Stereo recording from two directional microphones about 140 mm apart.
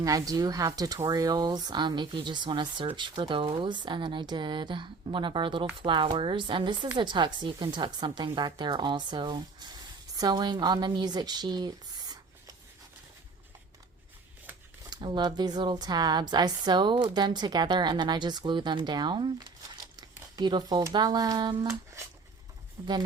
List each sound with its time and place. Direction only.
0.0 s speech: 25° right (ahead or behind)
14.8 s speech: 30° right (ahead or behind)
20.3 s speech: 30° right (ahead or behind)